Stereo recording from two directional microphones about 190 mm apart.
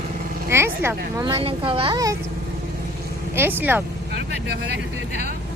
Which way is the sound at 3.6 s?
10° right (ahead or behind).